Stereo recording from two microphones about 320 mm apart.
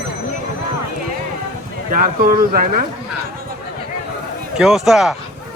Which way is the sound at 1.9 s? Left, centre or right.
Right.